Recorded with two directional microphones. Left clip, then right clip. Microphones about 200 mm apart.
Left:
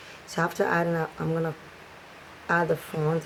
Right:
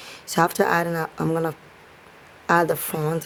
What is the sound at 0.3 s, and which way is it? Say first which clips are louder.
Speech: right 5 dB; 50° right (ahead or behind).